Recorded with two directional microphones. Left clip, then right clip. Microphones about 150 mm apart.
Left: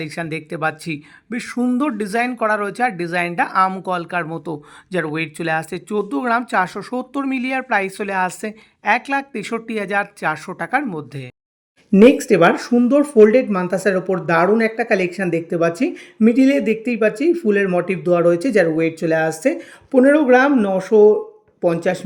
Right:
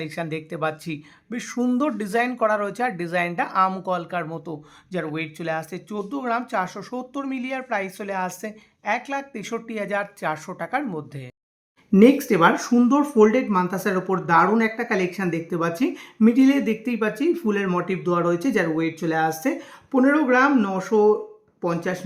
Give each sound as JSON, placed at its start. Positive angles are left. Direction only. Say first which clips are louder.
{"t": 0.0, "sound": "speech", "louder": "left 3 dB", "side_deg": 25}
{"t": 11.9, "sound": "speech", "louder": "left 5 dB", "side_deg": 15}